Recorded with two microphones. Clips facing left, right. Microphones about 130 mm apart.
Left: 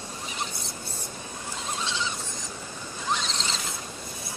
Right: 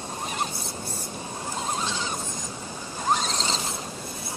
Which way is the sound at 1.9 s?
45° right (ahead or behind).